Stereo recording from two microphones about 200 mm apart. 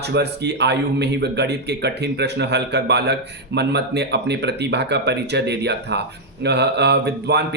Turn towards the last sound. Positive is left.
turn(degrees=-55)  # may be behind; listen again after turning